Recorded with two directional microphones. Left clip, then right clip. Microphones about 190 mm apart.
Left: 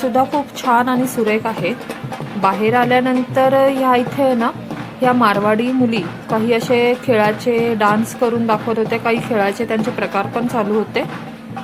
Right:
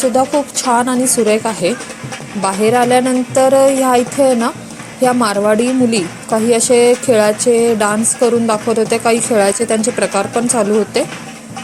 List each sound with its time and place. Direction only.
0.1 s a woman's voice: 10° right (ahead or behind)